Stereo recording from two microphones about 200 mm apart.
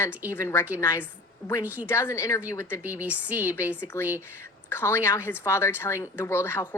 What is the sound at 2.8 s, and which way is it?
A woman's voice, 10° right (ahead or behind).